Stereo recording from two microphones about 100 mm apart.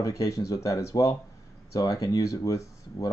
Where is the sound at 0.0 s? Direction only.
35° left (ahead or behind).